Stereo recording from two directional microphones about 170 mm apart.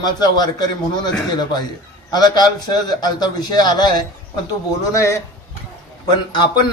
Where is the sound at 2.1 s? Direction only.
25° left (ahead or behind).